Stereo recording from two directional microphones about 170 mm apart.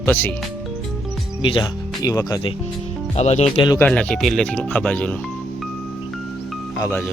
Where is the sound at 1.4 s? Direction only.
30° left (ahead or behind).